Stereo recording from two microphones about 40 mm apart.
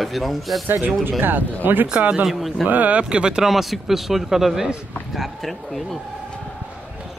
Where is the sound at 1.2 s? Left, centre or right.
Right.